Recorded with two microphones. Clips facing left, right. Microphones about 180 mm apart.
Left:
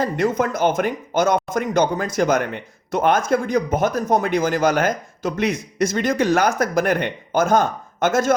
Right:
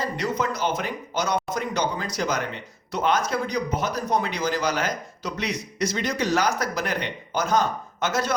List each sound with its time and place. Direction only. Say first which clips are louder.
0.0 s speech: left 6 dB; 50° left (ahead or behind)